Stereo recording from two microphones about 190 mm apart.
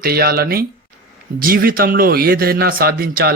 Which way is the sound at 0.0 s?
55° right (ahead or behind).